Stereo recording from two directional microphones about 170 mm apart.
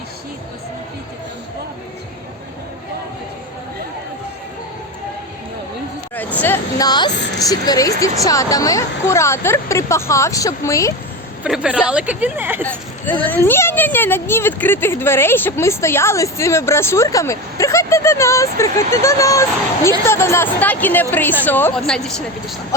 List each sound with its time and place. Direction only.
6.1 s hubbub: 10° left (ahead or behind)
6.7 s speech: 25° left (ahead or behind)
11.4 s speech: 5° right (ahead or behind)
12.6 s speech: 10° left (ahead or behind)